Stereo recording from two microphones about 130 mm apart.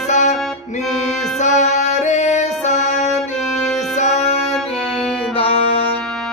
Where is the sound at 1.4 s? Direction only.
65° left (ahead or behind); by 5.9 s 45° left (ahead or behind).